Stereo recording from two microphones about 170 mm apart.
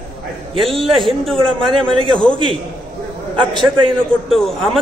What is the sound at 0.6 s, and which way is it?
A man's voice, centre (ahead or behind).